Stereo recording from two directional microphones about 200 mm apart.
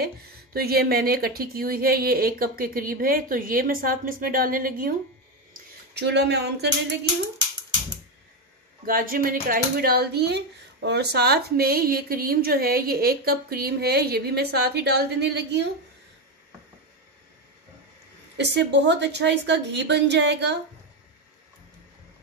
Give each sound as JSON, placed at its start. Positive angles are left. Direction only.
{"t": 0.0, "sound": "a woman's voice", "side_deg": -50}
{"t": 5.5, "sound": "speech", "side_deg": -60}
{"t": 8.8, "sound": "a woman's voice", "side_deg": -45}
{"t": 18.4, "sound": "a woman's voice", "side_deg": -60}